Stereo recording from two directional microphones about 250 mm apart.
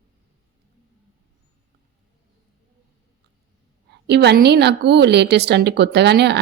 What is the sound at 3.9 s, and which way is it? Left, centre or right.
A woman's voice, right.